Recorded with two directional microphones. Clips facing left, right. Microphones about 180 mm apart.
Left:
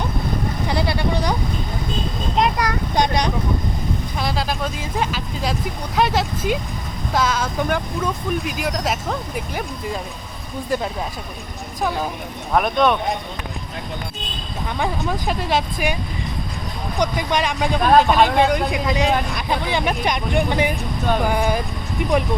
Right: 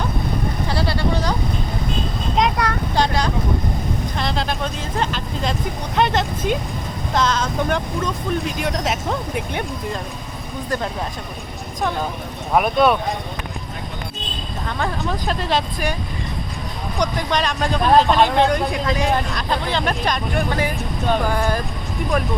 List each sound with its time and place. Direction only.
0.7 s speech: 15° left (ahead or behind)
2.4 s speech: 10° left (ahead or behind)
4.2 s speech: 5° left (ahead or behind)
11.8 s speech: 5° left (ahead or behind)
12.5 s speech: 5° right (ahead or behind)
14.7 s speech: 15° left (ahead or behind)
17.0 s speech: 10° left (ahead or behind)